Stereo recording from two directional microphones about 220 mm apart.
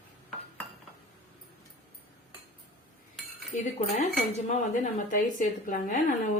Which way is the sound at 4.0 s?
35° left (ahead or behind).